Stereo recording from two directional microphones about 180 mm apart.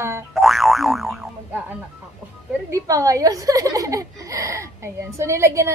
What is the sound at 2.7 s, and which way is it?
Speech, 20° right (ahead or behind).